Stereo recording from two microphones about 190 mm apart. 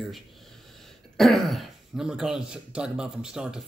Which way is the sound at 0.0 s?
Centre (ahead or behind).